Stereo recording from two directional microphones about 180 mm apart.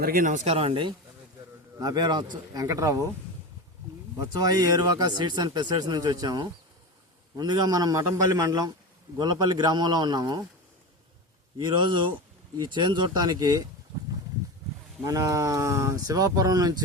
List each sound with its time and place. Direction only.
0.0 s speech: 50° right (ahead or behind); by 3.1 s 20° right (ahead or behind)
4.2 s speech: 20° right (ahead or behind)
11.5 s speech: 25° right (ahead or behind)
15.0 s speech: 20° right (ahead or behind)